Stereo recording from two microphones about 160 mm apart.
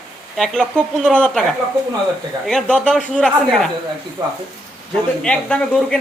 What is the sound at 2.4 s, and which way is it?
Speech, 5° left (ahead or behind).